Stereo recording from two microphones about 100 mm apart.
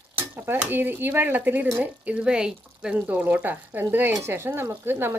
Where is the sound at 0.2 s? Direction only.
20° right (ahead or behind).